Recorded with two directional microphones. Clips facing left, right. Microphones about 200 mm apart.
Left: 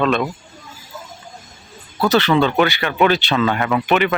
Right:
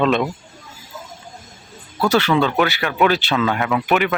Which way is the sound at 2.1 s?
10° right (ahead or behind).